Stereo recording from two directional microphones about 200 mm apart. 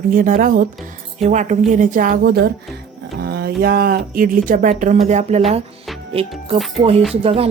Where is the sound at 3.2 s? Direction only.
50° right (ahead or behind).